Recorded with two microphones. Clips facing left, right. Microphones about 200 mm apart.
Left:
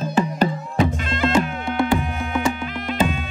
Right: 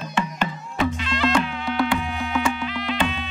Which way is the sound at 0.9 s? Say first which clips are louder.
Left 1 dB; 50° left (ahead or behind).